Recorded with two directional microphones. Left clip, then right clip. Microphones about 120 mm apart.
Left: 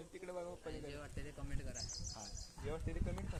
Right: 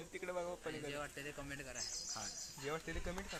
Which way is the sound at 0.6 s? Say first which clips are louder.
Right 4 dB; 35° right (ahead or behind).